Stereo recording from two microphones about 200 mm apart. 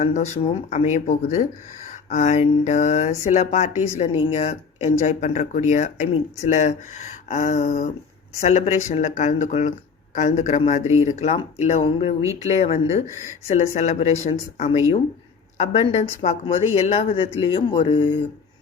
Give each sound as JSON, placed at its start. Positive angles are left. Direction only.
{"t": 0.0, "sound": "speech", "side_deg": 35}